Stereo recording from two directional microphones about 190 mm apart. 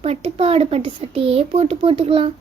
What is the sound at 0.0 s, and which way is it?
Speech, 30° right (ahead or behind).